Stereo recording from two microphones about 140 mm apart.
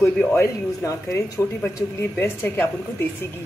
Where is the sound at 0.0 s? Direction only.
10° left (ahead or behind).